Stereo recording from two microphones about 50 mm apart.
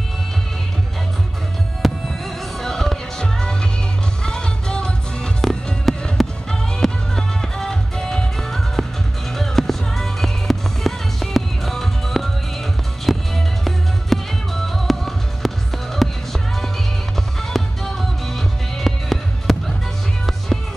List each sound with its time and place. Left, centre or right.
1.8 s music: centre
5.4 s music: centre